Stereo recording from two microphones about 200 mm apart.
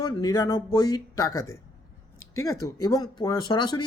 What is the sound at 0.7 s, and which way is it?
Speech, 20° left (ahead or behind).